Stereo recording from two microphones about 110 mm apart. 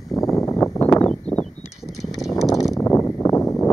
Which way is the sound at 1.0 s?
10° left (ahead or behind).